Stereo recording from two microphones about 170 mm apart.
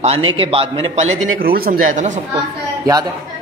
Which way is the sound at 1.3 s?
60° right (ahead or behind).